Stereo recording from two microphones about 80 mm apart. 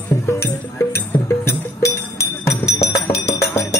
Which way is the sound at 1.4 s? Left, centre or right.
Left.